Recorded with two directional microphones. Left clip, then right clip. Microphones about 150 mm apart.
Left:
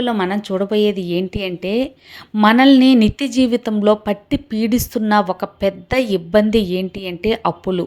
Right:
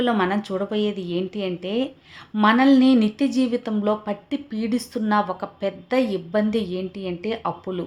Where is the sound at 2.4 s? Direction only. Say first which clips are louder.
Left 5 dB; 45° left (ahead or behind).